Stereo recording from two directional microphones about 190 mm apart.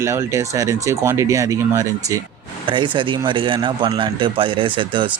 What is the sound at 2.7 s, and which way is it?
A man's voice, 25° right (ahead or behind).